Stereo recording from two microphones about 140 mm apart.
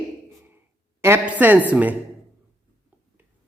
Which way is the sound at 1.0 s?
15° right (ahead or behind).